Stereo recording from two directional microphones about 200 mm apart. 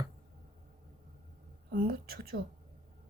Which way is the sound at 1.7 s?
45° right (ahead or behind).